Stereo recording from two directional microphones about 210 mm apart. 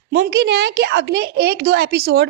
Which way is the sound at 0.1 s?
50° right (ahead or behind).